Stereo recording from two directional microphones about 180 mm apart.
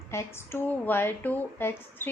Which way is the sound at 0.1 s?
15° left (ahead or behind).